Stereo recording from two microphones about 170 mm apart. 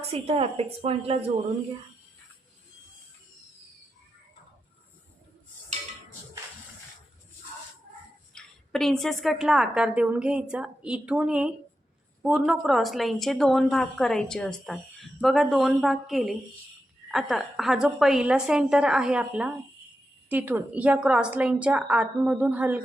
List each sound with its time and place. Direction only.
0.0 s a woman's voice: 35° right (ahead or behind)
8.4 s a woman's voice: centre (ahead or behind)